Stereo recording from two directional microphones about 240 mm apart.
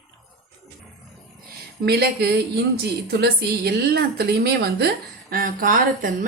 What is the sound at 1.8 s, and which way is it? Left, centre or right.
A woman's voice, right.